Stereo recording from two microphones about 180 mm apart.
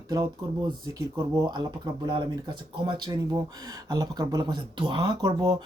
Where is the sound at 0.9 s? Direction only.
20° right (ahead or behind).